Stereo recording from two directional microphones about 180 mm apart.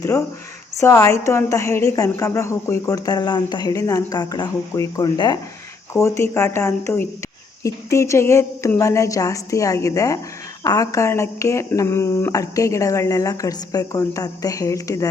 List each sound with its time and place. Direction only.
0.8 s a woman's voice: 15° left (ahead or behind)